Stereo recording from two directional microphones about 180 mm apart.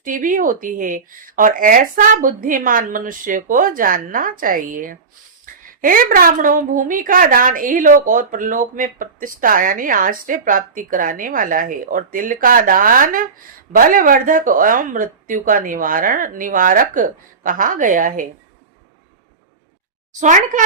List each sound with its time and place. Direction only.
0.0 s a woman's voice: 50° right (ahead or behind)
20.1 s a woman's voice: 45° right (ahead or behind)